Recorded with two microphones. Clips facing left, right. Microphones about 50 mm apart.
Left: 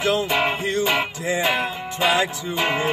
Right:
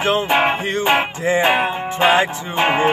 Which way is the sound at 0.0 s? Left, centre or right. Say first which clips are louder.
Right 4 dB; right.